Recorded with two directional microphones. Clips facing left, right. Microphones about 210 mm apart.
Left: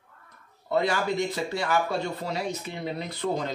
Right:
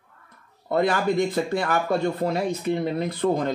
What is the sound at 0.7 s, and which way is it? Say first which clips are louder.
Speech: right 4 dB; 55° right (ahead or behind).